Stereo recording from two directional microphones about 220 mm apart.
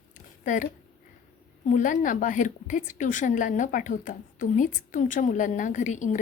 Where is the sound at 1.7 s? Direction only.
35° left (ahead or behind).